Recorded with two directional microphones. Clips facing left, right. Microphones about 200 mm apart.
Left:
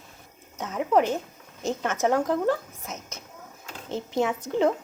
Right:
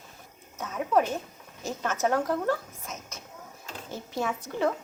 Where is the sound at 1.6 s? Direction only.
20° left (ahead or behind).